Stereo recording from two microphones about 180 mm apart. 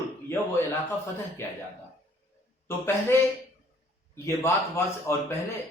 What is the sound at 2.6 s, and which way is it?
A man's voice, 15° left (ahead or behind).